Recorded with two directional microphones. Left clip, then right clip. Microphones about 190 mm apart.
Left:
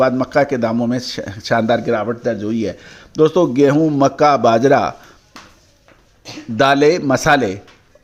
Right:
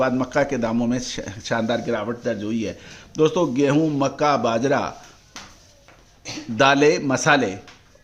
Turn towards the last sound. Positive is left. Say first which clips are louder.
# left 5 dB
turn(degrees=30)  # may be behind; listen again after turning